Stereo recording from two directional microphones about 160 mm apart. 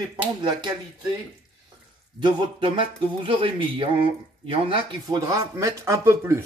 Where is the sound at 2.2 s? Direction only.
30° right (ahead or behind).